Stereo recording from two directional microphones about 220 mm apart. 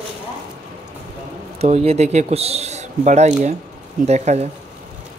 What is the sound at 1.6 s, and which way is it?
A man's voice, 30° right (ahead or behind).